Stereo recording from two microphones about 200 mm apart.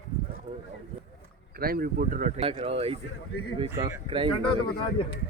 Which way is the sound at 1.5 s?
45° right (ahead or behind).